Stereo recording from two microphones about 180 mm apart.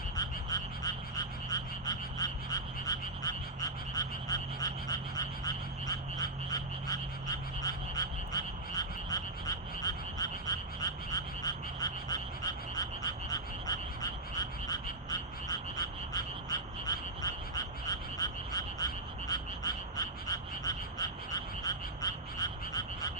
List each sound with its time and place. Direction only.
0.2 s frog: 20° left (ahead or behind)